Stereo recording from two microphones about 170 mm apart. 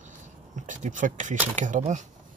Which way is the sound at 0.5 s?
50° right (ahead or behind).